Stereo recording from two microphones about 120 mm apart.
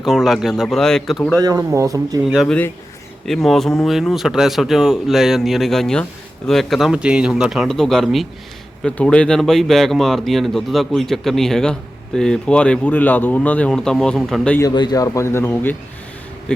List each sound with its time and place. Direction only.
0.0 s speech: centre (ahead or behind)
1.4 s speech: 30° right (ahead or behind)
2.2 s speech: 5° right (ahead or behind)
14.6 s speech: 35° left (ahead or behind); by 15.7 s 20° left (ahead or behind)
16.5 s speech: 5° left (ahead or behind)